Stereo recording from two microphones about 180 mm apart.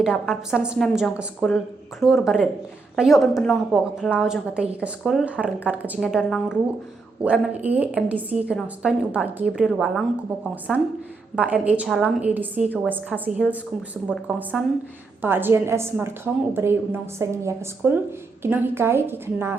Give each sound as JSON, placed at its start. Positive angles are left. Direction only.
{"t": 0.0, "sound": "a woman's voice", "side_deg": -5}